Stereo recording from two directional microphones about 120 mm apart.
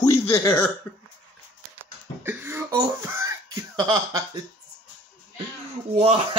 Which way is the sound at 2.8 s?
25° right (ahead or behind).